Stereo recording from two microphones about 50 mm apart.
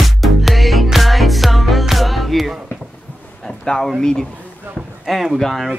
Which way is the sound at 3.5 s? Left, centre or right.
Centre.